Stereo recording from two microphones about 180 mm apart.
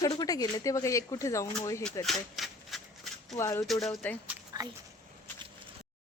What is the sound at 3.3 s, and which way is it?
Speech, 15° left (ahead or behind).